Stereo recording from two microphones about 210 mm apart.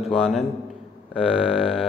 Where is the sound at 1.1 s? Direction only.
5° right (ahead or behind).